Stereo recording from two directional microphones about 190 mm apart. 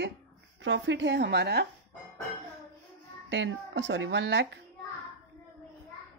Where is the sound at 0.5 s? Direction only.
75° right (ahead or behind); by 1.6 s 60° right (ahead or behind).